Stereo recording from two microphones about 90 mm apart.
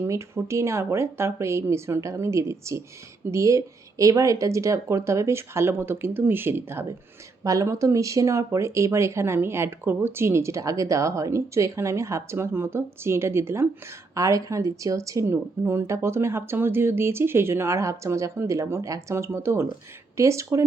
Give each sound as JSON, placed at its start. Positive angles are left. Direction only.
{"t": 0.0, "sound": "speech", "side_deg": -30}
{"t": 7.4, "sound": "speech", "side_deg": -40}